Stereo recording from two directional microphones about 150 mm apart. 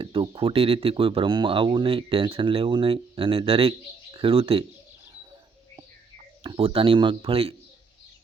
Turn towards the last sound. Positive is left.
turn(degrees=-40)  # may be behind; listen again after turning